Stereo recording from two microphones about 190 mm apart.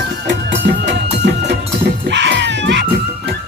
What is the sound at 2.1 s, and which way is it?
Music, 70° right (ahead or behind).